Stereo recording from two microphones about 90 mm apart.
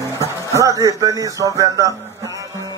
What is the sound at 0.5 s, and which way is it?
Music, 35° right (ahead or behind).